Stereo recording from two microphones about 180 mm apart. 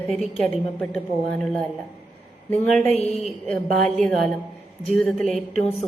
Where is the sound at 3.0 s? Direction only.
35° left (ahead or behind).